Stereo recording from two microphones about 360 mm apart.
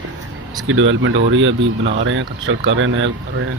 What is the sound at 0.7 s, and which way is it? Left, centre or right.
Speech, right.